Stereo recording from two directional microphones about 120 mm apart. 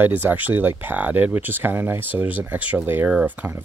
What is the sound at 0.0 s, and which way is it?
Speech, 15° right (ahead or behind).